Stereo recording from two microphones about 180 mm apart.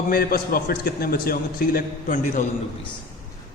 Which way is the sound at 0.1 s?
55° left (ahead or behind).